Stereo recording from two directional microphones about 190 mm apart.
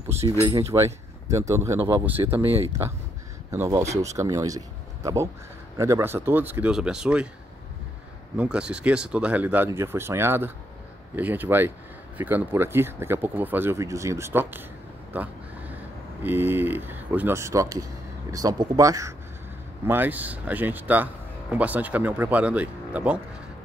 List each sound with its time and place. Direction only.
0.2 s speech: 25° right (ahead or behind); by 7.2 s 5° right (ahead or behind)
8.4 s speech: 5° right (ahead or behind)
16.2 s speech: 10° right (ahead or behind)